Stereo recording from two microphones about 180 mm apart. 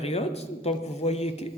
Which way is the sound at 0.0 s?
35° left (ahead or behind).